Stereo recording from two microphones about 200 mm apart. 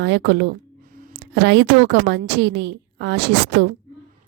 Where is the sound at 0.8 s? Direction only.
45° right (ahead or behind).